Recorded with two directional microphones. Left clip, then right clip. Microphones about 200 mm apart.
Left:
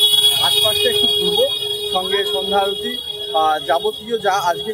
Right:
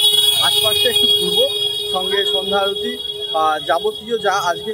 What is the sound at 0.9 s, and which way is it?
Speech, 50° right (ahead or behind).